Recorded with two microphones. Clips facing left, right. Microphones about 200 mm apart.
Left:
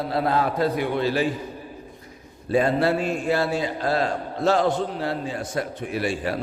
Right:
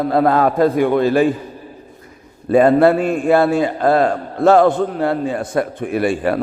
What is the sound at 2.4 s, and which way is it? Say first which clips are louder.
A man's voice: right 9 dB; 55° right (ahead or behind).